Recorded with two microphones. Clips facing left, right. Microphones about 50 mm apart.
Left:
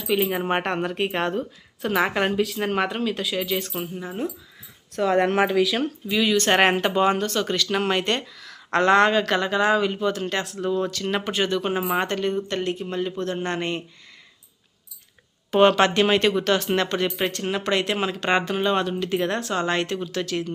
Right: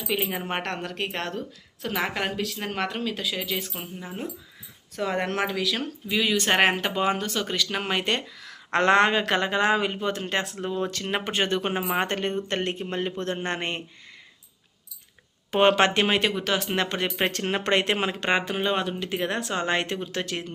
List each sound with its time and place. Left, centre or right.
0.1 s speech: centre
0.4 s a woman's voice: centre
5.3 s a woman's voice: centre
6.1 s speech: centre
8.8 s a man's voice: right
11.2 s speech: right
15.5 s a man's voice: right
17.4 s a man's voice: right
18.3 s speech: centre
19.4 s a man's voice: right
20.1 s a man's voice: right